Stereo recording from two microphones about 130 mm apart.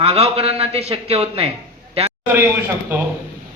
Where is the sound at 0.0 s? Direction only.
50° right (ahead or behind).